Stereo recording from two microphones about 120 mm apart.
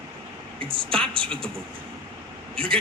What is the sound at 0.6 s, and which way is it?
Speech, 50° right (ahead or behind).